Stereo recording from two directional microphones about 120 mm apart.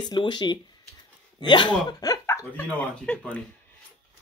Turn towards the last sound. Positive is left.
turn(degrees=10)  # may be behind; listen again after turning